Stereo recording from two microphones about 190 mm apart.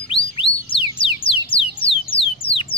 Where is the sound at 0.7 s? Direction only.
30° left (ahead or behind).